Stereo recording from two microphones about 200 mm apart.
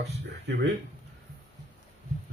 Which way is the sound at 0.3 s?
55° right (ahead or behind).